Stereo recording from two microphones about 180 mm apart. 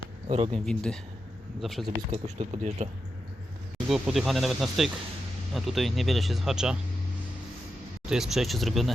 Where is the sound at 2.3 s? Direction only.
35° right (ahead or behind).